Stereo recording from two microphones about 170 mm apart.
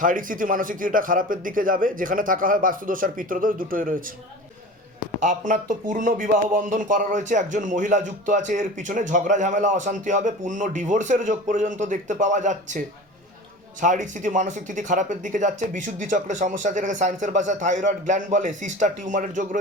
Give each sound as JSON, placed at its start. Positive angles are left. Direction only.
{"t": 0.0, "sound": "speech", "side_deg": -50}
{"t": 5.2, "sound": "speech", "side_deg": -50}
{"t": 13.8, "sound": "speech", "side_deg": -50}